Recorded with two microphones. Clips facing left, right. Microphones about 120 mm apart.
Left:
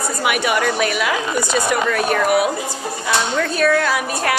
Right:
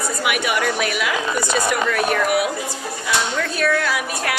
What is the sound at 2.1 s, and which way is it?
Speech, 45° left (ahead or behind).